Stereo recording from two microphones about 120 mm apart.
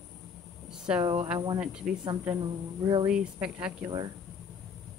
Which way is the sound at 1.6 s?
5° right (ahead or behind).